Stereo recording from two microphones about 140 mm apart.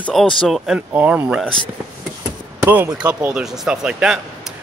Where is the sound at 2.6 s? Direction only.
20° right (ahead or behind).